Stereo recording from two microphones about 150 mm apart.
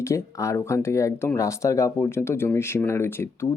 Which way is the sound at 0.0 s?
20° left (ahead or behind).